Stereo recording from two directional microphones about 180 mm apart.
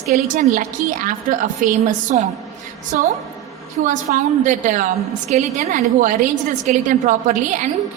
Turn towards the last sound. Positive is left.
turn(degrees=-45)  # may be behind; listen again after turning